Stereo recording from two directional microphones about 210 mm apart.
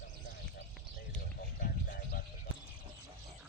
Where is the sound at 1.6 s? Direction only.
45° left (ahead or behind).